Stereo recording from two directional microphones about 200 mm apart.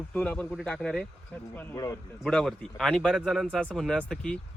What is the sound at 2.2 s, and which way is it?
Speech, centre (ahead or behind).